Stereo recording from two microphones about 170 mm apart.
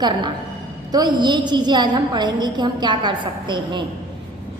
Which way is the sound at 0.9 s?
25° right (ahead or behind).